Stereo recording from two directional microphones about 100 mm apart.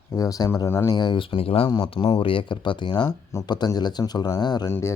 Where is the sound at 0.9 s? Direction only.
45° left (ahead or behind); by 1.7 s 70° left (ahead or behind).